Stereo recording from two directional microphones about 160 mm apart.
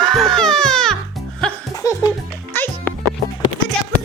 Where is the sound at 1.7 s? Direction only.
20° left (ahead or behind).